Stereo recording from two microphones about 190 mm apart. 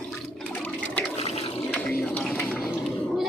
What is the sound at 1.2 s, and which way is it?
Water, 30° left (ahead or behind).